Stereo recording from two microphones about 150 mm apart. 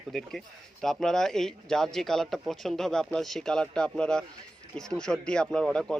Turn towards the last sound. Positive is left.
turn(degrees=5)  # may be behind; listen again after turning